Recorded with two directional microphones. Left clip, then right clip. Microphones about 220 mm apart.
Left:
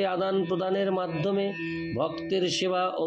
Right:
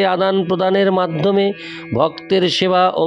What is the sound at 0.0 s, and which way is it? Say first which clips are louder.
Speech: right 11 dB; 50° right (ahead or behind).